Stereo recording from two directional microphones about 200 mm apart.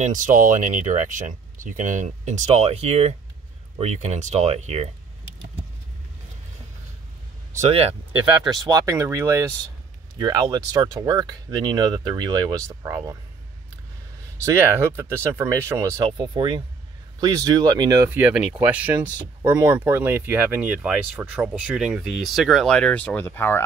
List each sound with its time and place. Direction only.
0.0 s speech: 40° right (ahead or behind)
7.7 s speech: 30° right (ahead or behind)
8.6 s speech: 15° right (ahead or behind)
14.4 s speech: 15° right (ahead or behind); by 23.6 s 10° left (ahead or behind)